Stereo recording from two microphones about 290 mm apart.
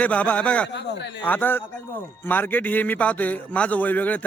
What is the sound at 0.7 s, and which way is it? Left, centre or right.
Speech, left.